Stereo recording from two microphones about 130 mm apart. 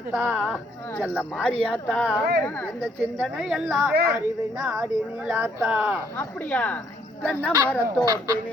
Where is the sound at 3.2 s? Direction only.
5° right (ahead or behind).